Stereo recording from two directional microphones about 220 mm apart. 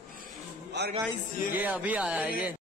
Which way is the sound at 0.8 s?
50° right (ahead or behind).